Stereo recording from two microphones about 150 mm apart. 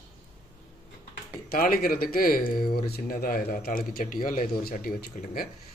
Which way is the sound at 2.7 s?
90° left.